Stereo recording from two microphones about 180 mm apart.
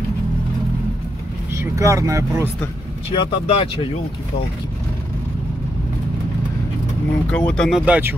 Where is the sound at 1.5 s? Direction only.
15° right (ahead or behind).